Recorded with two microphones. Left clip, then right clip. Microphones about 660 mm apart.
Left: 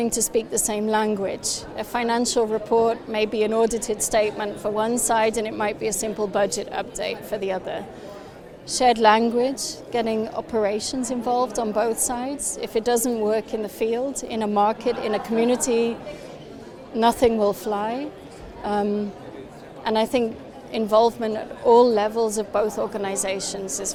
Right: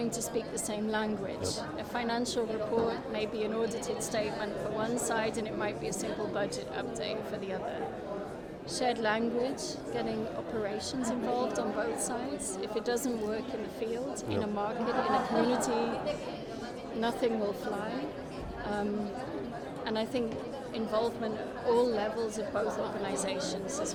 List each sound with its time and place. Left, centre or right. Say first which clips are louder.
0.1 s a woman's voice: left 11 dB; left
17.0 s a woman's voice: left 13 dB; left